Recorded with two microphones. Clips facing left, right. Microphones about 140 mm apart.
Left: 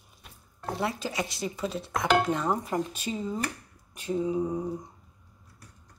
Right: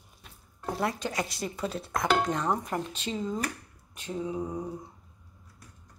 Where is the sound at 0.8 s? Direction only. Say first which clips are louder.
Even; 5° left (ahead or behind).